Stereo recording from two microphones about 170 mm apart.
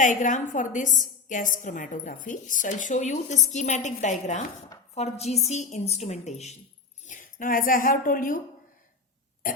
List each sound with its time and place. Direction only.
0.0 s a woman's voice: 50° left (ahead or behind)